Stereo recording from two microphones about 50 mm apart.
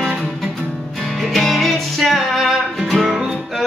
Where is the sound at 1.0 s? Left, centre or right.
Centre.